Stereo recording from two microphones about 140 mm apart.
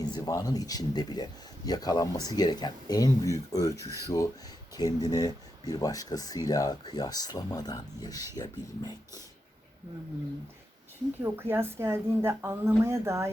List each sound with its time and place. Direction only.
0.0 s speech: 25° left (ahead or behind)
11.2 s a woman's voice: 15° right (ahead or behind)